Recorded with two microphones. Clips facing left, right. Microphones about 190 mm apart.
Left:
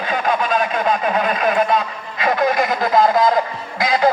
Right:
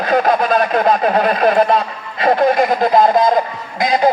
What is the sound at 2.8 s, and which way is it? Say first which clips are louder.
Speech: right 1 dB; 20° right (ahead or behind).